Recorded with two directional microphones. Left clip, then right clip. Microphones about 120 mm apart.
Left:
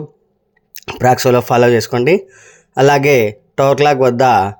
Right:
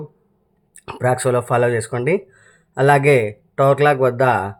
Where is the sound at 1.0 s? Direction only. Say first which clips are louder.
Left 7 dB; 35° left (ahead or behind).